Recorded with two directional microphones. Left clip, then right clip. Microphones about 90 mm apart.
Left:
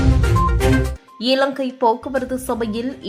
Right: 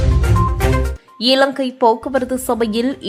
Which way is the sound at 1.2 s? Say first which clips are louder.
Right 4 dB; 25° right (ahead or behind).